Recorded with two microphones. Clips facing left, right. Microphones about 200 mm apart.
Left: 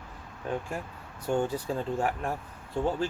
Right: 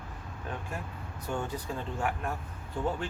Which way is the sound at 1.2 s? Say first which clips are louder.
Left 7 dB; 30° left (ahead or behind).